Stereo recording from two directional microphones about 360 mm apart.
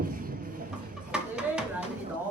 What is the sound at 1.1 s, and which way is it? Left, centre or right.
Speech, centre.